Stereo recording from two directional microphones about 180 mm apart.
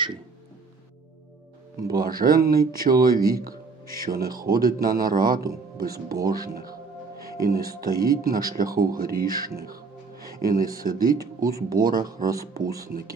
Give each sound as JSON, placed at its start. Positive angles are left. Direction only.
{"t": 1.8, "sound": "speech", "side_deg": -55}
{"t": 6.3, "sound": "music", "side_deg": -55}
{"t": 7.8, "sound": "speech", "side_deg": -55}